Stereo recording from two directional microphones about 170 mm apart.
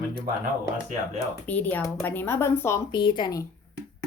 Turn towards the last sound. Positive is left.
turn(degrees=25)  # may be behind; listen again after turning